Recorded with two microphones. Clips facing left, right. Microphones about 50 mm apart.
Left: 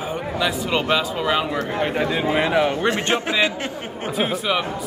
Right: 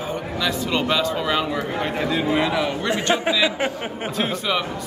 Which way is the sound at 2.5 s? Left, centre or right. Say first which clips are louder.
Left 3 dB; left.